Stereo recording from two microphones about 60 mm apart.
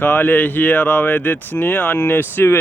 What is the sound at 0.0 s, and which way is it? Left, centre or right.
Speech, left.